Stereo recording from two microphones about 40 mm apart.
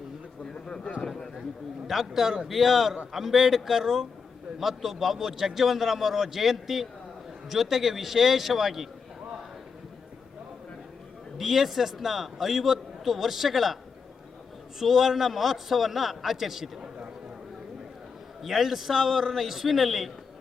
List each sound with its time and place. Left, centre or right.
1.0 s a sound: centre
1.9 s a man's voice: centre
11.3 s a man's voice: centre
14.8 s a man's voice: centre
18.4 s a man's voice: centre